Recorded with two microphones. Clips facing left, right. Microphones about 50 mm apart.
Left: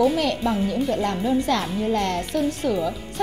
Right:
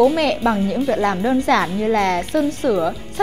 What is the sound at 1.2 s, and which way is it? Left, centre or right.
A woman's voice, right.